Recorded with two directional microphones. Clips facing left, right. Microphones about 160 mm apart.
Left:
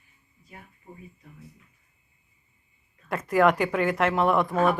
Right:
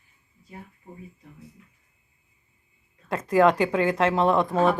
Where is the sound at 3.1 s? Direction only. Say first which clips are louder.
Right 2 dB; 20° right (ahead or behind).